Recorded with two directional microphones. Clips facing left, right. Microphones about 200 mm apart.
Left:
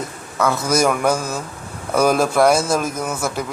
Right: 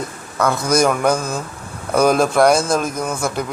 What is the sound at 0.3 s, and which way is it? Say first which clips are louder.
A man's voice: right 1 dB; 5° left (ahead or behind).